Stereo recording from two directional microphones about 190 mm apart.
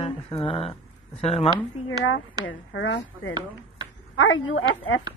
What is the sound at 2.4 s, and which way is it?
Speech, 75° left (ahead or behind).